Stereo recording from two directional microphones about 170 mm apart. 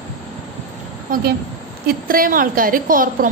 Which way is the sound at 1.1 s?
55° right (ahead or behind).